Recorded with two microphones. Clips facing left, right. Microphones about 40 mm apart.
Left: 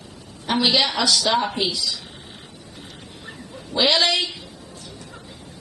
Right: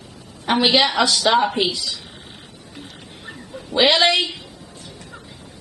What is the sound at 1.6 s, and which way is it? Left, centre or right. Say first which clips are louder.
Speech: right 2 dB; right.